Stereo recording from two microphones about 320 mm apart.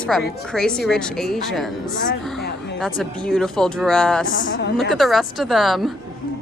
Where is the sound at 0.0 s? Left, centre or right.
Centre.